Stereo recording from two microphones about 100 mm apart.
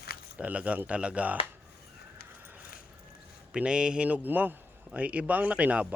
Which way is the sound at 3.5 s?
10° right (ahead or behind).